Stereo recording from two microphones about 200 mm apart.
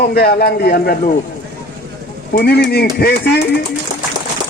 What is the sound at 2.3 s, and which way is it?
Speech, 50° left (ahead or behind).